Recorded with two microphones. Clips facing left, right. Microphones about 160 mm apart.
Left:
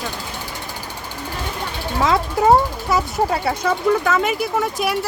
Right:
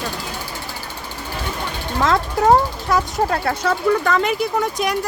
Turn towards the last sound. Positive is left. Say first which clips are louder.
# even
turn(degrees=0)  # may be behind; listen again after turning